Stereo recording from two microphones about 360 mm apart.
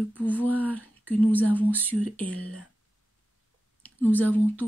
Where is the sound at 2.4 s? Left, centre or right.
Right.